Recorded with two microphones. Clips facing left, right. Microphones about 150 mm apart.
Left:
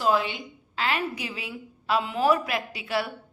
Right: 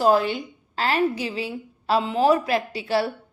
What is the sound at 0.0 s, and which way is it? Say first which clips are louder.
A woman's voice: right 5 dB; 40° right (ahead or behind).